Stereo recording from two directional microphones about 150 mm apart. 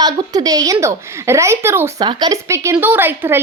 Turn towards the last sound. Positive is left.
turn(degrees=-15)  # may be behind; listen again after turning